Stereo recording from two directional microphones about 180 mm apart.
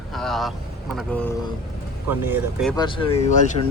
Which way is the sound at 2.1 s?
10° right (ahead or behind).